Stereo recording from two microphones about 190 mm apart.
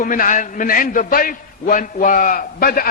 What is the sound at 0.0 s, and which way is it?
A man's voice, 45° left (ahead or behind).